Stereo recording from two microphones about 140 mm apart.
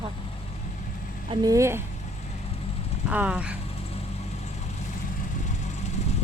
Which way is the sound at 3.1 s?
10° right (ahead or behind).